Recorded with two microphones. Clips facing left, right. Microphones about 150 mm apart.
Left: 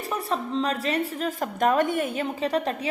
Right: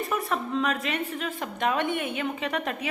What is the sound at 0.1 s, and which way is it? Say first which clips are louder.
A woman's voice: left 4 dB; 30° left (ahead or behind).